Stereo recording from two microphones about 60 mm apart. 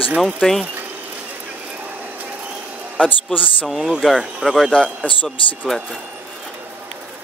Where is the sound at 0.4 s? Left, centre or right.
Centre.